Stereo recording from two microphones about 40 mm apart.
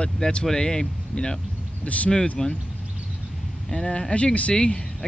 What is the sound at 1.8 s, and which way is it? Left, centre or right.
Speech, left.